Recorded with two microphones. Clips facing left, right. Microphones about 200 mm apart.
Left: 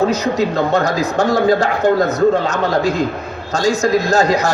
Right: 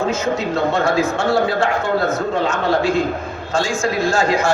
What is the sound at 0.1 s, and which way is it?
A man's voice, 40° left (ahead or behind).